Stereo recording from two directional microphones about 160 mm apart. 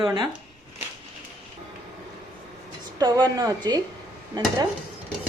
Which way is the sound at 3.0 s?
25° right (ahead or behind).